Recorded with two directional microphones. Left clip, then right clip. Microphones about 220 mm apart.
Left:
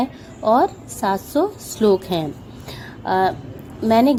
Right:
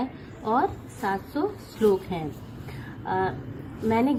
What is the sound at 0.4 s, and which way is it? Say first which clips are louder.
A woman's voice: left 8 dB; 45° left (ahead or behind).